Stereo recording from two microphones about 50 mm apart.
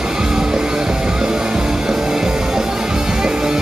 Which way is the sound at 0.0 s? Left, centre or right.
Centre.